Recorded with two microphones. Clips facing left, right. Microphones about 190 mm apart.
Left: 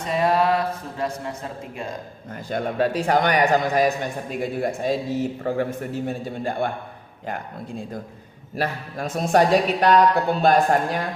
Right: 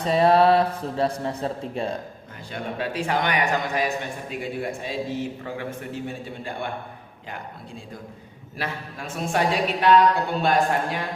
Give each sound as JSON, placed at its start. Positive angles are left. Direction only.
{"t": 0.0, "sound": "speech", "side_deg": -35}
{"t": 2.3, "sound": "a man's voice", "side_deg": 45}
{"t": 8.5, "sound": "a man's voice", "side_deg": 40}